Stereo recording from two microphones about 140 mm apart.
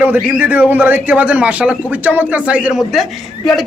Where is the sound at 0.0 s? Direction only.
15° right (ahead or behind).